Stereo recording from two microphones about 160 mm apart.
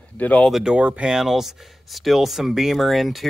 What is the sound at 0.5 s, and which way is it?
Speech, 5° right (ahead or behind).